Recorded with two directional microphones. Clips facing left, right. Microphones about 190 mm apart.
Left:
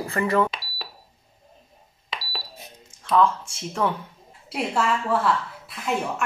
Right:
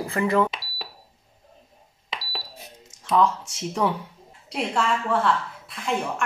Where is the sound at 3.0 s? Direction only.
20° right (ahead or behind).